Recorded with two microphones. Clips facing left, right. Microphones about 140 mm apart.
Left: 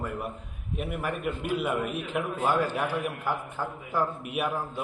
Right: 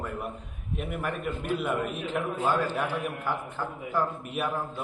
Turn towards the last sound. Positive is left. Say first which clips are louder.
# left 1 dB
turn(degrees=10)  # may be behind; listen again after turning